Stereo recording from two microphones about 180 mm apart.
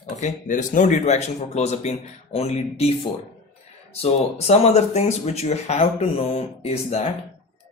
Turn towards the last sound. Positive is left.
turn(degrees=35)  # may be behind; listen again after turning